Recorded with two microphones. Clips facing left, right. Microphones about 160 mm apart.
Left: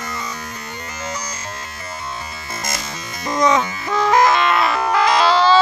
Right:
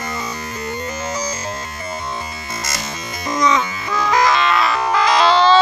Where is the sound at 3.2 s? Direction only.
50° left (ahead or behind).